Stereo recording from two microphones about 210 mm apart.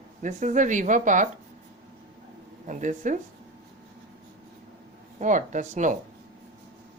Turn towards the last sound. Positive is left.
turn(degrees=-35)  # may be behind; listen again after turning